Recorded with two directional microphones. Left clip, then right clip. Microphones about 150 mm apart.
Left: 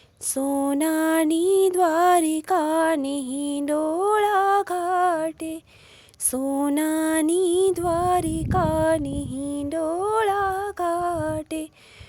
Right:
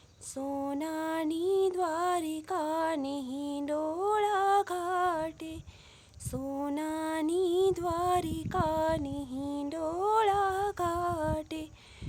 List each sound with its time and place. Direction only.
0.3 s music: 45° left (ahead or behind)
6.3 s female singing: 40° left (ahead or behind)